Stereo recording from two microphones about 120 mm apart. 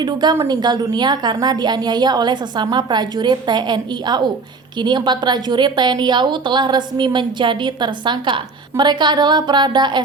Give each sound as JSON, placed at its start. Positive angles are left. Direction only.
{"t": 0.0, "sound": "a woman's voice", "side_deg": -35}